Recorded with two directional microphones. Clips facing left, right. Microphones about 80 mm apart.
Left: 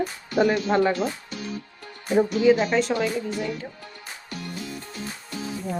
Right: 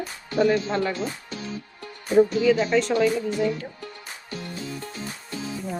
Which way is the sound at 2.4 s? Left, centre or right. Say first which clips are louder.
Left 1 dB; left.